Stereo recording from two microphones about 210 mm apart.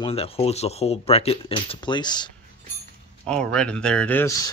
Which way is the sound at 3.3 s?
5° left (ahead or behind).